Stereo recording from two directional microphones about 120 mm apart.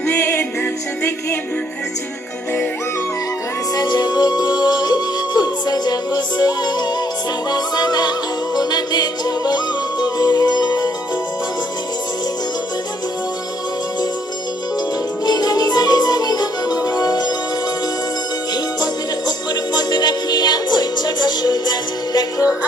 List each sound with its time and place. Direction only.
0.0 s music: 20° left (ahead or behind)
3.8 s music: 35° left (ahead or behind)
15.3 s music: 35° left (ahead or behind)
19.7 s music: 35° left (ahead or behind)